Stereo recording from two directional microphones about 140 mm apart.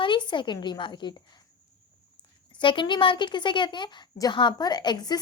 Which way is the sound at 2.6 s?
35° left (ahead or behind).